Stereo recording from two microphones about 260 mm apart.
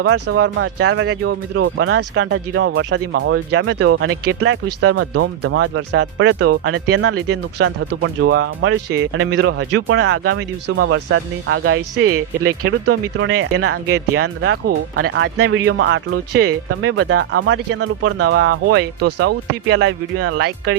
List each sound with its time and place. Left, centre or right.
0.0 s speech: right
4.9 s speech: right
8.0 s speech: right
12.0 s speech: right